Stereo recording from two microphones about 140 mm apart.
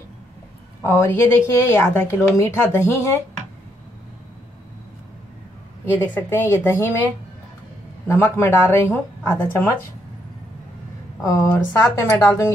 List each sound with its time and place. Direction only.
0.8 s speech: 20° left (ahead or behind)
5.9 s speech: 15° left (ahead or behind)
8.1 s speech: 15° left (ahead or behind)
11.2 s speech: 20° left (ahead or behind)